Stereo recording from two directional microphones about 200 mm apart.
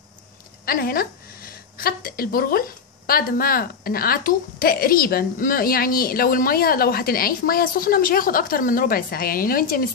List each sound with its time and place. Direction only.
0.7 s a woman's voice: 50° left (ahead or behind)